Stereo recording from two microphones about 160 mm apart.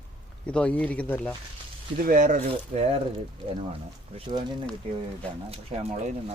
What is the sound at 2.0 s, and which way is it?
Speech, 60° right (ahead or behind).